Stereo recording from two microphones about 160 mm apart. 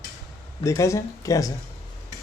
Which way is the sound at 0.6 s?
20° left (ahead or behind).